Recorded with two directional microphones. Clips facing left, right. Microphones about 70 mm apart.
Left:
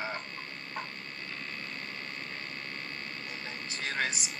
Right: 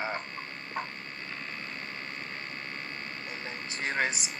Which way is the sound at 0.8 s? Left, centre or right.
Right.